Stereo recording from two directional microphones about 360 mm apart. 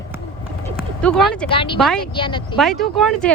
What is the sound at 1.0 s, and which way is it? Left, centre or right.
Speech, centre.